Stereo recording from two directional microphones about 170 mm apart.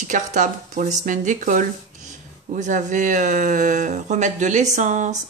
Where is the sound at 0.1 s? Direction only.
45° right (ahead or behind).